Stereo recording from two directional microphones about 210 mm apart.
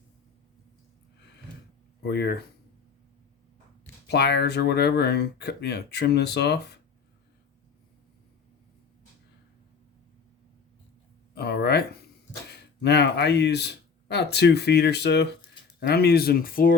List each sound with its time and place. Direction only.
2.0 s speech: 50° left (ahead or behind)
4.0 s speech: 50° left (ahead or behind)
11.3 s a sound: 50° left (ahead or behind)
12.5 s speech: 50° left (ahead or behind)